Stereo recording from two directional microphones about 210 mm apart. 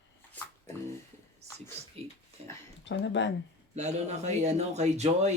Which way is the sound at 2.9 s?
60° left (ahead or behind).